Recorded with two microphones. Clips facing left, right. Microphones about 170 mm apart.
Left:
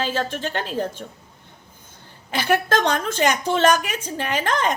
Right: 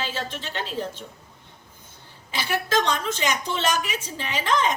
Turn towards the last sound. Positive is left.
turn(degrees=50)  # may be behind; listen again after turning